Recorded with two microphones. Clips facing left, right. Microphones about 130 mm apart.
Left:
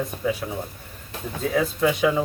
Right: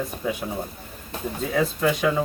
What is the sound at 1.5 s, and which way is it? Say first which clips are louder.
Speech: left 1 dB; centre (ahead or behind).